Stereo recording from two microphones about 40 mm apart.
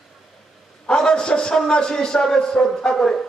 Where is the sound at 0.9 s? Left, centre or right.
Left.